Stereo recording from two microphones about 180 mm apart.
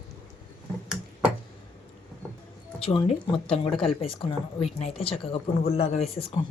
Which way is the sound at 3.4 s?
30° left (ahead or behind).